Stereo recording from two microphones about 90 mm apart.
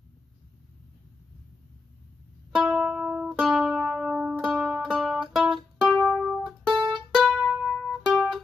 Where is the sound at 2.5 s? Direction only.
5° right (ahead or behind).